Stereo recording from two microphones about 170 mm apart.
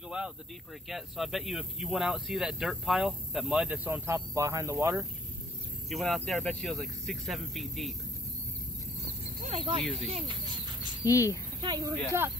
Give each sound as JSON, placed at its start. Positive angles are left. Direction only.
{"t": 0.8, "sound": "speech", "side_deg": 0}
{"t": 5.9, "sound": "speech", "side_deg": 0}
{"t": 9.5, "sound": "speech", "side_deg": -30}
{"t": 10.0, "sound": "a sound", "side_deg": -35}
{"t": 11.1, "sound": "speech", "side_deg": 20}
{"t": 11.6, "sound": "speech", "side_deg": -25}